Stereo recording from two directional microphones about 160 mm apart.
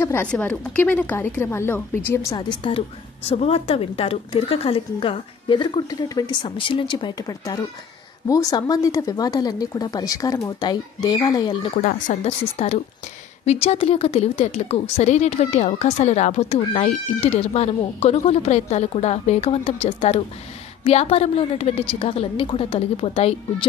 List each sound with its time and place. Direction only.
0.0 s a woman's voice: 15° left (ahead or behind)
2.3 s a woman's voice: 30° left (ahead or behind)
11.8 s speech: 55° left (ahead or behind)
12.3 s a woman's voice: 40° left (ahead or behind)